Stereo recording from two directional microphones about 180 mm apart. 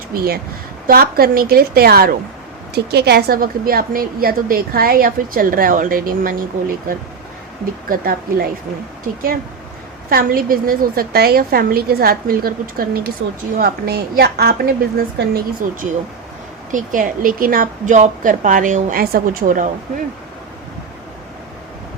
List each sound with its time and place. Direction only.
0.1 s a woman's voice: 55° right (ahead or behind)
10.1 s a woman's voice: 55° right (ahead or behind)
15.6 s a woman's voice: 45° right (ahead or behind)